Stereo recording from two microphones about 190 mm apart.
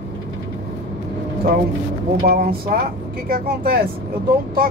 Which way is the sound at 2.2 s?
50° right (ahead or behind).